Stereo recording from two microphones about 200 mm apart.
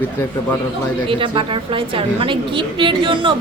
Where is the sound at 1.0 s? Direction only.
25° right (ahead or behind).